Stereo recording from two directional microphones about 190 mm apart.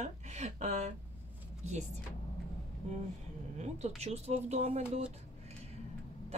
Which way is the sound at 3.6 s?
35° right (ahead or behind).